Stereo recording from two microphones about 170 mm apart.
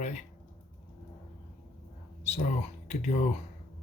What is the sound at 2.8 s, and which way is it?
Speech, 40° left (ahead or behind).